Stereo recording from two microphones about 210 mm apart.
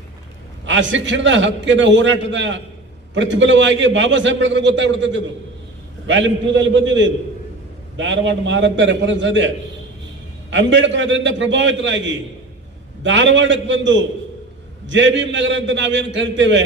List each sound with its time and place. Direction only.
0.7 s a man's voice: 60° right (ahead or behind)
10.5 s a man's voice: 60° right (ahead or behind)